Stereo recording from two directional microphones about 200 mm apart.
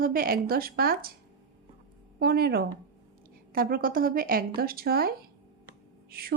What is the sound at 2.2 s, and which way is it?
A woman's voice, 50° right (ahead or behind).